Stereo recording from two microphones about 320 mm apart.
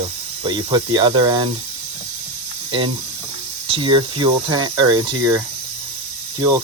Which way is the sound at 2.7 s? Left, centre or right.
Centre.